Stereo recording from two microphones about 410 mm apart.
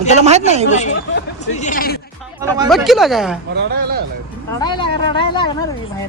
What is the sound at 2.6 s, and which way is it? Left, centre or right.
Speech, centre.